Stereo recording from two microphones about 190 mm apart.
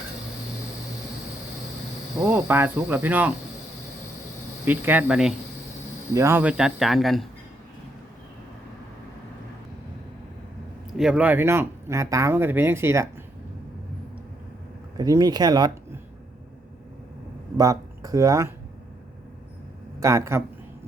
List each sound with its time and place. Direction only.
2.1 s speech: 10° right (ahead or behind)
4.6 s speech: 10° right (ahead or behind)
10.9 s speech: 5° right (ahead or behind)
14.9 s speech: 20° right (ahead or behind)
17.6 s speech: 20° right (ahead or behind)
20.0 s speech: 15° right (ahead or behind)